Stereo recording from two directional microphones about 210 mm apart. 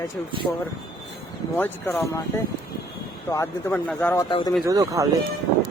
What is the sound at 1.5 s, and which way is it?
Speech, 10° left (ahead or behind).